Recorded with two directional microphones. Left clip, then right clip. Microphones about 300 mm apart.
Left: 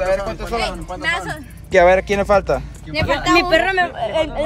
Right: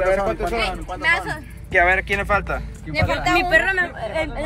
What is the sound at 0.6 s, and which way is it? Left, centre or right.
Speech, left.